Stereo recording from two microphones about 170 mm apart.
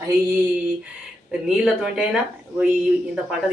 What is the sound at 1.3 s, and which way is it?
Speech, 5° right (ahead or behind).